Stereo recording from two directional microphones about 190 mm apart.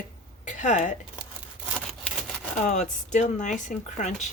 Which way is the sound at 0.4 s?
40° left (ahead or behind).